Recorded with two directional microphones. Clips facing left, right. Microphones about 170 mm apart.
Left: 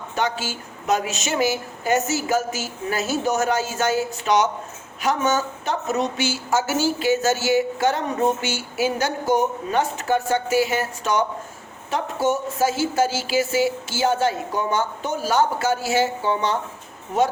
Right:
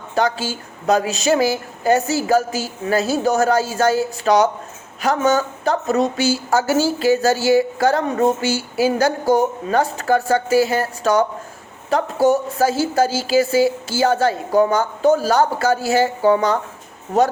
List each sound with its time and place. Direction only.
0.9 s a woman's voice: 35° right (ahead or behind)